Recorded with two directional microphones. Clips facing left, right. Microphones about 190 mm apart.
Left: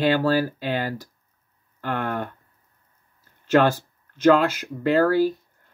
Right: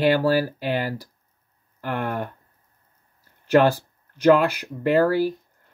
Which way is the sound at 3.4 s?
15° right (ahead or behind).